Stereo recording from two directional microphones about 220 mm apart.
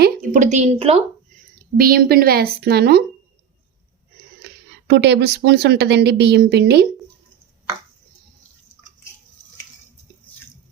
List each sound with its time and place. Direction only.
0.0 s a woman's voice: 35° right (ahead or behind)
1.5 s speech: 40° right (ahead or behind)
4.4 s speech: 50° right (ahead or behind)